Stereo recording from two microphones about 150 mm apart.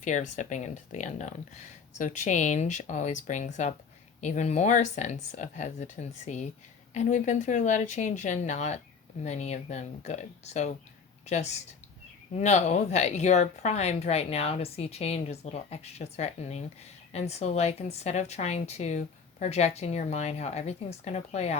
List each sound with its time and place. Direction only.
0.0 s a woman's voice: 55° left (ahead or behind)